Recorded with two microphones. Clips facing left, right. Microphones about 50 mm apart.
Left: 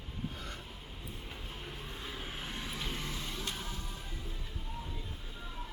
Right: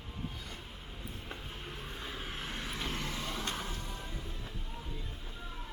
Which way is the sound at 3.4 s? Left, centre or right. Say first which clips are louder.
Right 2 dB; right.